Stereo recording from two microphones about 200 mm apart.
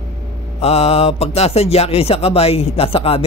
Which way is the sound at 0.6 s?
30° left (ahead or behind).